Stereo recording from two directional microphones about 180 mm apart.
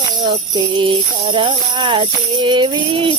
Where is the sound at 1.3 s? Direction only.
25° right (ahead or behind).